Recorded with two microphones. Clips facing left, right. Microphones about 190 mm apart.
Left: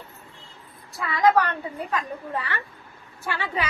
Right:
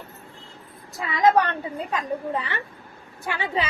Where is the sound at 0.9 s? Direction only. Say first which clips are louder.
Right 1 dB; 20° right (ahead or behind).